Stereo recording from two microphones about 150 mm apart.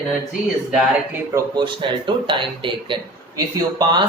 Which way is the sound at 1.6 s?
30° right (ahead or behind).